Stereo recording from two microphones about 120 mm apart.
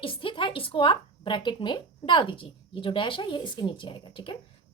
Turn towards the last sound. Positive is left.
turn(degrees=45)  # may be behind; listen again after turning